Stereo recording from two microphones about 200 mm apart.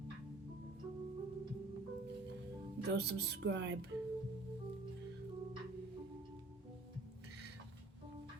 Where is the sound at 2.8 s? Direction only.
55° right (ahead or behind).